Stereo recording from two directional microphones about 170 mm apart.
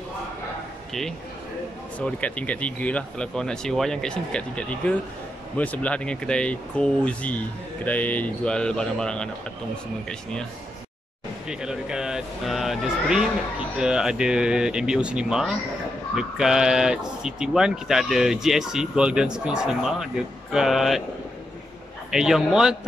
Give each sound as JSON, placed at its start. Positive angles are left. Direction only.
{"t": 2.0, "sound": "speech", "side_deg": 10}
{"t": 11.4, "sound": "speech", "side_deg": -5}
{"t": 22.1, "sound": "speech", "side_deg": -5}